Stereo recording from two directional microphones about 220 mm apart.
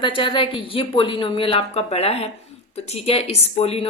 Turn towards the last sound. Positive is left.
turn(degrees=25)  # may be behind; listen again after turning